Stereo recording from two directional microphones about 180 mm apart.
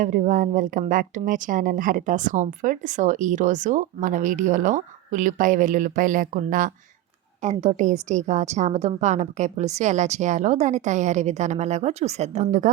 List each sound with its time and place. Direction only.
0.0 s a woman's voice: 45° right (ahead or behind)